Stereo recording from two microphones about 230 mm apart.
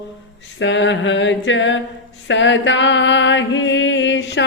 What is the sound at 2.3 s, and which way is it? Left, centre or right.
Music, left.